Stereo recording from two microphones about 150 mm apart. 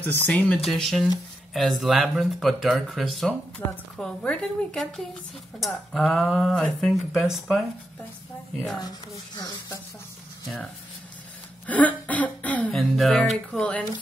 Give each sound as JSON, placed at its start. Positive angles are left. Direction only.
{"t": 0.0, "sound": "speech", "side_deg": 10}
{"t": 9.4, "sound": "speech", "side_deg": 25}
{"t": 11.6, "sound": "speech", "side_deg": 10}